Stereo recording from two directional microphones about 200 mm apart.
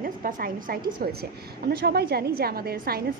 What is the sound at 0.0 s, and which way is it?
A woman's voice, 45° right (ahead or behind).